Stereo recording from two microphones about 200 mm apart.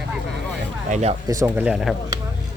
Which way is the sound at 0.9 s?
35° right (ahead or behind).